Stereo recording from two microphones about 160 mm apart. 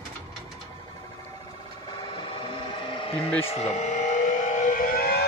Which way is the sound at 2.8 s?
35° left (ahead or behind).